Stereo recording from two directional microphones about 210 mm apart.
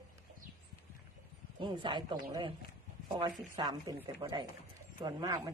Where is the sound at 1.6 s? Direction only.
20° right (ahead or behind).